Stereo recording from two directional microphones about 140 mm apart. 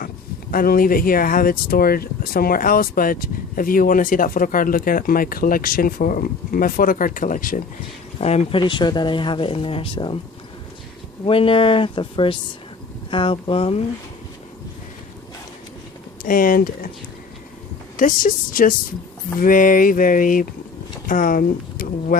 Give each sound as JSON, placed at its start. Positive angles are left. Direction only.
{"t": 0.5, "sound": "speech", "side_deg": 90}
{"t": 8.2, "sound": "speech", "side_deg": 50}
{"t": 8.5, "sound": "speech", "side_deg": 35}
{"t": 11.3, "sound": "speech", "side_deg": 40}
{"t": 16.2, "sound": "speech", "side_deg": 85}
{"t": 17.9, "sound": "a sound", "side_deg": 70}
{"t": 21.1, "sound": "speech", "side_deg": 75}